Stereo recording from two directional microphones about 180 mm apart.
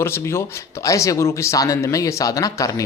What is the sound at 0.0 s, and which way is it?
Speech, 15° left (ahead or behind).